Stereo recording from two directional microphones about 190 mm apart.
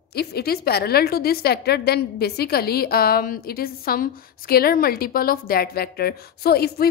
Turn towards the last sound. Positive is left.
turn(degrees=55)  # may be behind; listen again after turning